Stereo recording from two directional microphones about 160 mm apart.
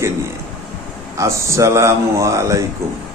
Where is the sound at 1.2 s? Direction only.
20° right (ahead or behind).